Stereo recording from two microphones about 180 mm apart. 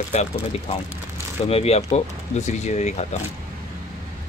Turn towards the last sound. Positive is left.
turn(degrees=40)  # may be behind; listen again after turning